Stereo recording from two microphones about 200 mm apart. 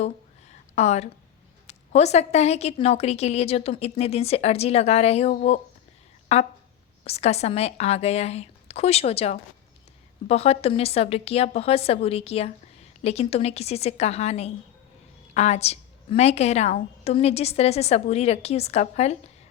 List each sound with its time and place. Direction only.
0.8 s a woman's voice: 35° left (ahead or behind)